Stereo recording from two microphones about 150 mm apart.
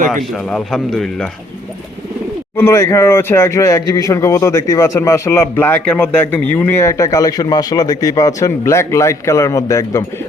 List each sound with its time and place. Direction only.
0.5 s speech: 5° left (ahead or behind)
2.6 s speech: 15° left (ahead or behind)